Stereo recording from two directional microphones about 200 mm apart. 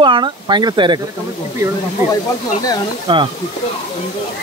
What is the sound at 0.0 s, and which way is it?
Speech, 25° right (ahead or behind).